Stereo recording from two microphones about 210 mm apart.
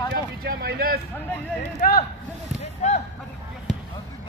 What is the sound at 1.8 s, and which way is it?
Speech, 45° left (ahead or behind).